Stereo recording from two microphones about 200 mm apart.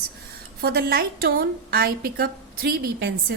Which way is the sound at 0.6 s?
50° right (ahead or behind).